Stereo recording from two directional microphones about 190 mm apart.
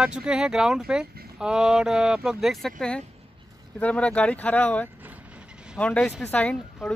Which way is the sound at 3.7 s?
5° left (ahead or behind).